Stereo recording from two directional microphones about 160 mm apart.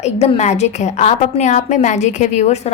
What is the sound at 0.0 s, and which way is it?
A woman's voice, 45° left (ahead or behind).